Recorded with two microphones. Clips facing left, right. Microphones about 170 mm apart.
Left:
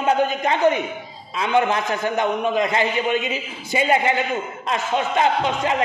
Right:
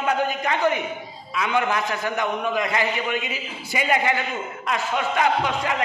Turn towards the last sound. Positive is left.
turn(degrees=25)  # may be behind; listen again after turning